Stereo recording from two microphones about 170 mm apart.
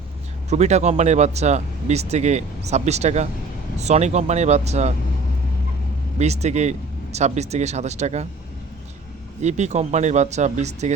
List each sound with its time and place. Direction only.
0.5 s speech: 40° right (ahead or behind)
6.1 s speech: 40° right (ahead or behind)
9.4 s speech: 40° right (ahead or behind)